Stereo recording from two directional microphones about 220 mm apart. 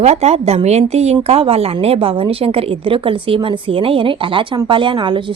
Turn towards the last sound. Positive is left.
turn(degrees=-20)  # may be behind; listen again after turning